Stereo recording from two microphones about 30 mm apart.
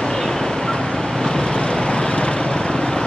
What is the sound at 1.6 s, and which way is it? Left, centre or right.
Vehicle, left.